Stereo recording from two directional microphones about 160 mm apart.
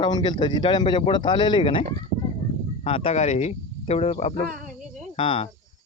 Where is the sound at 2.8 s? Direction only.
35° left (ahead or behind).